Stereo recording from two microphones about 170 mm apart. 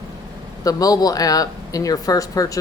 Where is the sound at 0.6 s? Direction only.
20° left (ahead or behind).